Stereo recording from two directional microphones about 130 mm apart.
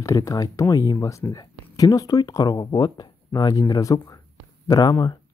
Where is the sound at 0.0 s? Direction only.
25° left (ahead or behind).